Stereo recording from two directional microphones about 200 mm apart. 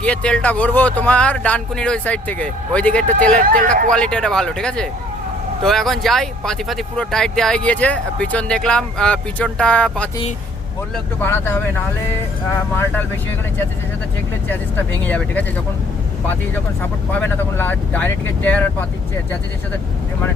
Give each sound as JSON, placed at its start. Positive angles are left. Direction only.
{"t": 0.0, "sound": "speech", "side_deg": 5}
{"t": 3.4, "sound": "speech", "side_deg": -45}
{"t": 3.8, "sound": "speech", "side_deg": 5}
{"t": 14.4, "sound": "speech", "side_deg": 10}
{"t": 16.8, "sound": "speech", "side_deg": 10}